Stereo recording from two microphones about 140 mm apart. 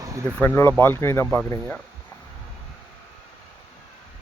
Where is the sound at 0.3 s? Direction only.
15° left (ahead or behind).